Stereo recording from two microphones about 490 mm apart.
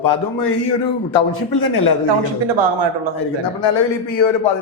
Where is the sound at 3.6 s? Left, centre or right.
Left.